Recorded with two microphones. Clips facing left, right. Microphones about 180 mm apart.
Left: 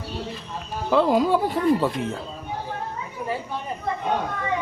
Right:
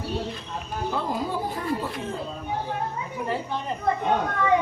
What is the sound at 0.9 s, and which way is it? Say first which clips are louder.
Speech: left 10 dB; 90° left.